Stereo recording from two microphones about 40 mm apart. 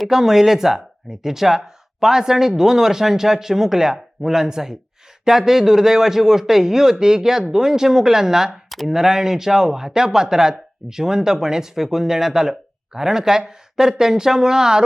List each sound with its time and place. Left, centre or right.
0.1 s speech: centre